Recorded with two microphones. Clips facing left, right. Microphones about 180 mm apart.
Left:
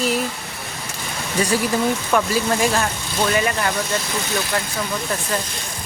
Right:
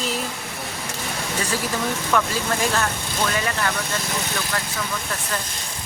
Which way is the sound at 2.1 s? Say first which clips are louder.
Left 2 dB; 10° left (ahead or behind).